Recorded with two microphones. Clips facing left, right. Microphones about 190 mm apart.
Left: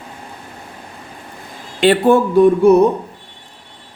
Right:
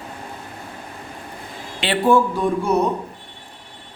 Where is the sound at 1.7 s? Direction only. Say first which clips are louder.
Left 5 dB; 55° left (ahead or behind).